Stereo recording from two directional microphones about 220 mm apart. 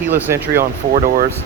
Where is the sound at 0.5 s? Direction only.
40° right (ahead or behind).